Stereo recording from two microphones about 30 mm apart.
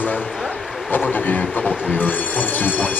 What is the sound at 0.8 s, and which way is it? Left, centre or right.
Speech, left.